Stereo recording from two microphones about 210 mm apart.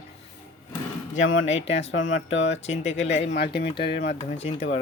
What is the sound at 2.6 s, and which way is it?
Speech, 35° left (ahead or behind).